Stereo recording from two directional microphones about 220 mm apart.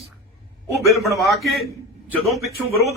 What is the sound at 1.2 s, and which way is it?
Speech, centre (ahead or behind).